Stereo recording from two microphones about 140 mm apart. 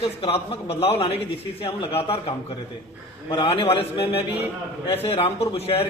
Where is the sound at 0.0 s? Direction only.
45° left (ahead or behind).